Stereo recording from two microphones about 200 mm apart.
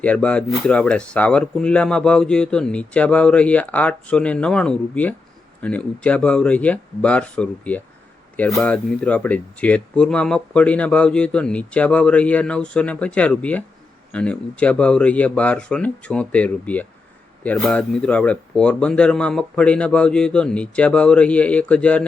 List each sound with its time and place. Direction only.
0.0 s speech: 5° left (ahead or behind)